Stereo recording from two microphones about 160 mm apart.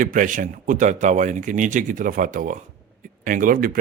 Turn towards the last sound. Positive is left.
turn(degrees=-60)  # may be behind; listen again after turning